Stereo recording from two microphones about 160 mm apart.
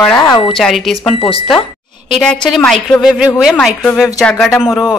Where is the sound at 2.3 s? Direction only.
5° left (ahead or behind).